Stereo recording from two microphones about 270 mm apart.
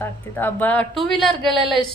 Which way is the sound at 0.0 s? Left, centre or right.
Centre.